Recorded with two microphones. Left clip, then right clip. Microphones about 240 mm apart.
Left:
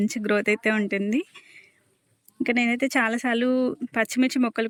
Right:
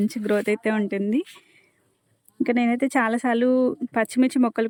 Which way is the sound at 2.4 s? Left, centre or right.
Centre.